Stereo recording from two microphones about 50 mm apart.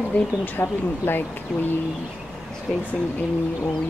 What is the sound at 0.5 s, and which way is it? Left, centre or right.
Speech, left.